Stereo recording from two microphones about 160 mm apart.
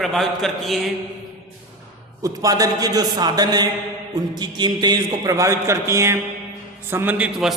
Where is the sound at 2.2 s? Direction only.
20° right (ahead or behind); by 7.5 s 5° right (ahead or behind).